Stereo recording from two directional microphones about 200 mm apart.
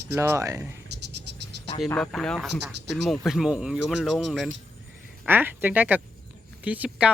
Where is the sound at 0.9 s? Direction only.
55° right (ahead or behind).